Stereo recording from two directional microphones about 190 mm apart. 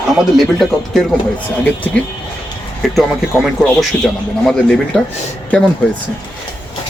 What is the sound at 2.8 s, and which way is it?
A man's voice, centre (ahead or behind).